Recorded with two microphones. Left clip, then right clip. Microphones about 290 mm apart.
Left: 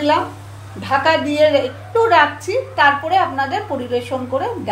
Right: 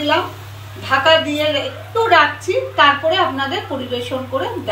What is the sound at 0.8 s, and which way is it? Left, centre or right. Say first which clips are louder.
A woman's voice: right 2 dB; left.